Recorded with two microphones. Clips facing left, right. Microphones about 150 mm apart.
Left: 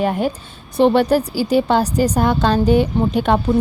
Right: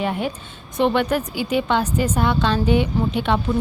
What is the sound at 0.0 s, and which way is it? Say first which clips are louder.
A woman's voice: left 5 dB; 40° left (ahead or behind).